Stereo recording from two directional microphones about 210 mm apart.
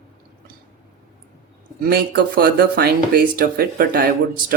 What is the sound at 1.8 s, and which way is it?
Speech, 50° right (ahead or behind).